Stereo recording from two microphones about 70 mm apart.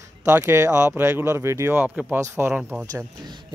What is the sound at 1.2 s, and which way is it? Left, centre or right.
Speech, right.